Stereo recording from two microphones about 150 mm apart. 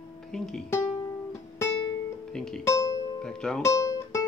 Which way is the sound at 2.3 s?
5° left (ahead or behind).